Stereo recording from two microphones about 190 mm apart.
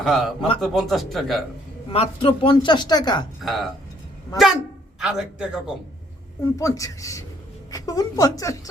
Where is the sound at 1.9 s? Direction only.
30° left (ahead or behind).